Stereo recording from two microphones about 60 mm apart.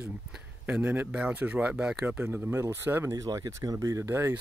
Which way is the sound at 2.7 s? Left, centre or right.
Right.